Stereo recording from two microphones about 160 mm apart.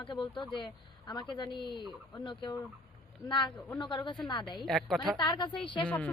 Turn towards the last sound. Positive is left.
turn(degrees=10)  # may be behind; listen again after turning